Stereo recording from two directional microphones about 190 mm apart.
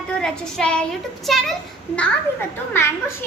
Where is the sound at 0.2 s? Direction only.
5° left (ahead or behind).